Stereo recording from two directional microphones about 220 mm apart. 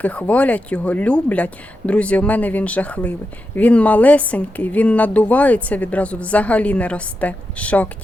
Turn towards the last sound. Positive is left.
turn(degrees=5)  # may be behind; listen again after turning